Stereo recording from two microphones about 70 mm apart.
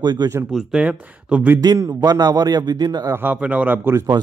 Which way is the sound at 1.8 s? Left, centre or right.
Right.